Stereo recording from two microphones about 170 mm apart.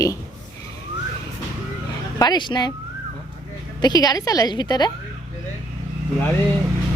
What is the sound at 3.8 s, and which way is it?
A woman's voice, 25° left (ahead or behind).